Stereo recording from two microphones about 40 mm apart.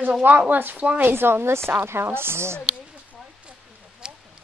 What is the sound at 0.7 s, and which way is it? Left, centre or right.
Speech, right.